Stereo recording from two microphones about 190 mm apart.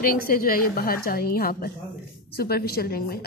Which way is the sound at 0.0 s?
50° left (ahead or behind).